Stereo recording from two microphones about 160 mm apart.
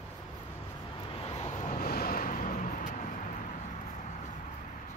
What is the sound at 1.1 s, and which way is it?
Vehicle, 40° left (ahead or behind).